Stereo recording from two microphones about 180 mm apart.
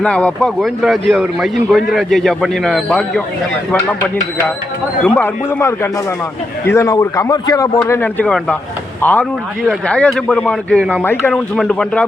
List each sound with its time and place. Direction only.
0.0 s a man's voice: 5° left (ahead or behind)